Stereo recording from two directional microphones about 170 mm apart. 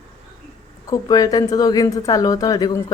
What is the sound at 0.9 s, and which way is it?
A woman's voice, 25° left (ahead or behind).